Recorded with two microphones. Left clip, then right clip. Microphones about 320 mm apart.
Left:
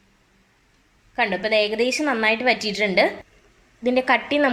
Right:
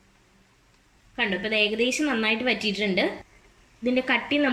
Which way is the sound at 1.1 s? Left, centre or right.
Centre.